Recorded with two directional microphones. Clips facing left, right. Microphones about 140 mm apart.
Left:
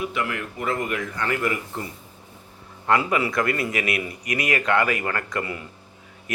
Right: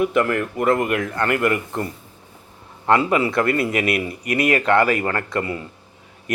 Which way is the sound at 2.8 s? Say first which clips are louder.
Right 4 dB; 30° right (ahead or behind).